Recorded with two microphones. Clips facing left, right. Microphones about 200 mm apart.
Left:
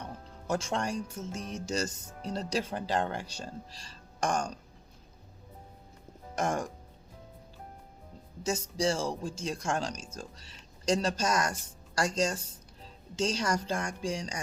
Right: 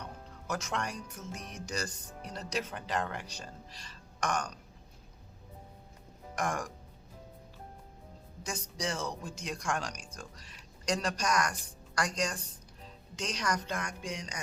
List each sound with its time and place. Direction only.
0.0 s speech: 30° left (ahead or behind)
6.3 s speech: 25° left (ahead or behind)
8.4 s speech: 25° left (ahead or behind)